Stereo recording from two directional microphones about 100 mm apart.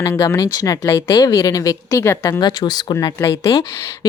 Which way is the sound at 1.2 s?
35° left (ahead or behind).